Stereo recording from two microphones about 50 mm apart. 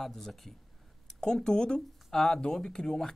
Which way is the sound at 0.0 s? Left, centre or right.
Centre.